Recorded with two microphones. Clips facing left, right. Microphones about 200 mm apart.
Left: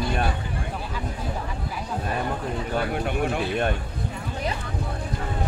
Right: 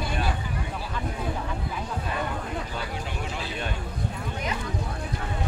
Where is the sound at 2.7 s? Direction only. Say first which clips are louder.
Left 8 dB; 55° left (ahead or behind).